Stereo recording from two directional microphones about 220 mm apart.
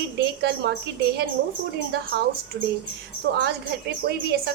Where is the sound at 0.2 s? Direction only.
50° right (ahead or behind).